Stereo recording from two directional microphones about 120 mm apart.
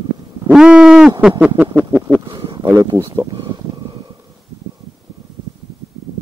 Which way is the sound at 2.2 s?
40° right (ahead or behind).